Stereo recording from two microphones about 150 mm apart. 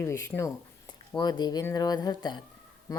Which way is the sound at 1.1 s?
30° left (ahead or behind).